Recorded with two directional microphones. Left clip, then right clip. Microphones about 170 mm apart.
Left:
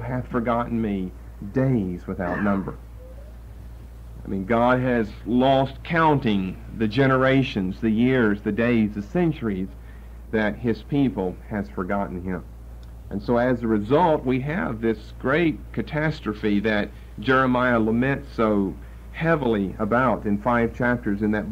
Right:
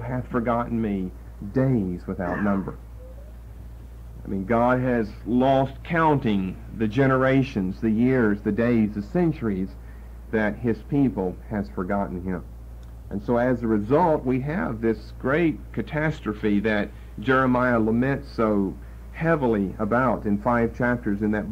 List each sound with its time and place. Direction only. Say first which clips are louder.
0.0 s a man's voice: even; 35° right (ahead or behind)
1.5 s speech: even; 55° right (ahead or behind); by 2.8 s 35° right (ahead or behind)
4.3 s speech: left 1 dB; 45° right (ahead or behind)
10.3 s speech: left 1 dB; 45° right (ahead or behind)
13.1 s speech: left 1 dB; 40° right (ahead or behind); by 15.0 s 55° right (ahead or behind)
15.0 s speech: left 1 dB; 40° right (ahead or behind)
17.6 s speech: left 1 dB; 50° right (ahead or behind)